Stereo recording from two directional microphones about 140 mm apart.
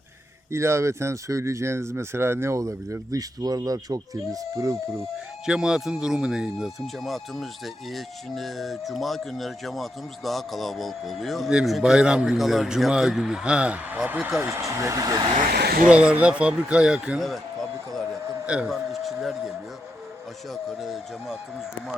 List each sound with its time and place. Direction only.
0.5 s speech: 20° right (ahead or behind)
5.5 s speech: 5° right (ahead or behind); by 15.3 s 25° right (ahead or behind)
15.9 s a man's voice: 10° right (ahead or behind)
18.4 s a sound: 5° right (ahead or behind)
20.5 s speech: centre (ahead or behind)